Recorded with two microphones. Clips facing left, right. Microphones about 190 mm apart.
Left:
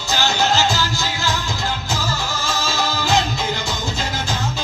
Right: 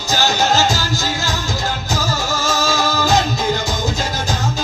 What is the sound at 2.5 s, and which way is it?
Music, 45° right (ahead or behind).